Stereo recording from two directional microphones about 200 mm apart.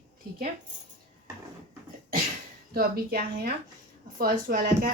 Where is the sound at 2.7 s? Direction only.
50° right (ahead or behind).